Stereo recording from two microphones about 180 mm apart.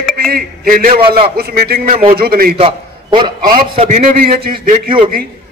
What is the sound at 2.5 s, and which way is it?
A man's voice, 30° right (ahead or behind).